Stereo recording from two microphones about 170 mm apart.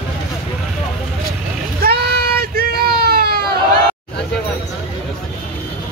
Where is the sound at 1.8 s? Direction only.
70° right (ahead or behind).